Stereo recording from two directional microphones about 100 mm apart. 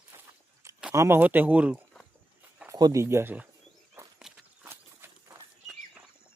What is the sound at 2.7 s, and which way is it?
Speech, 35° right (ahead or behind).